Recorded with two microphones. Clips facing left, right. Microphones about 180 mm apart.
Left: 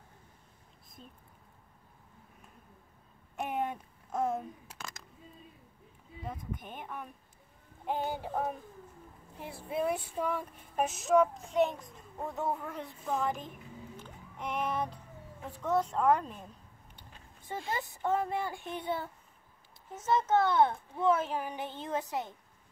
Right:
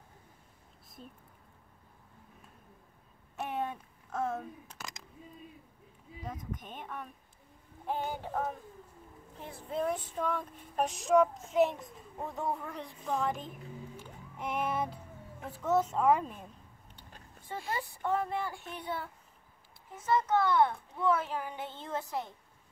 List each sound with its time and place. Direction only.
3.3 s a sound: 20° left (ahead or behind)
6.2 s speech: 5° left (ahead or behind)
9.4 s female singing: 10° left (ahead or behind)
13.9 s music: 10° right (ahead or behind)
15.4 s female singing: 5° right (ahead or behind)
17.6 s a child's voice: 20° left (ahead or behind)